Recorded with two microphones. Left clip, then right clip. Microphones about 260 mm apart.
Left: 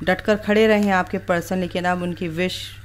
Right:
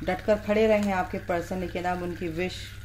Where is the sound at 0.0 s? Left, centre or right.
Left.